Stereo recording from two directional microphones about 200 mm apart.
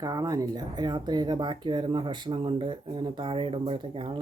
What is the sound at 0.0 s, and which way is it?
Speech, 20° right (ahead or behind).